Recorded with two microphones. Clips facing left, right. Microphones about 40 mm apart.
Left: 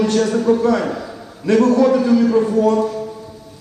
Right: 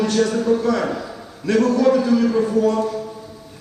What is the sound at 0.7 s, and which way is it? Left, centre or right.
A man's voice, centre.